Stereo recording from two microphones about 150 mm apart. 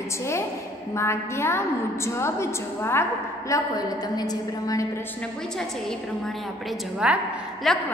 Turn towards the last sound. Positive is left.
turn(degrees=-5)  # may be behind; listen again after turning